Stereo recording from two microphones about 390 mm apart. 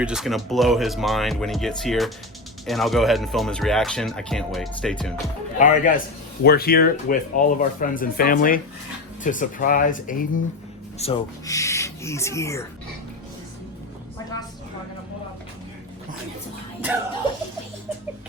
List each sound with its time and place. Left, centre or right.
0.0 s speech: centre
5.5 s speech: centre